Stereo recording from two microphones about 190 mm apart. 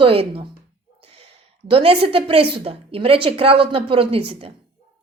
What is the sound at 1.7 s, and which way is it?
A woman's voice, 30° right (ahead or behind).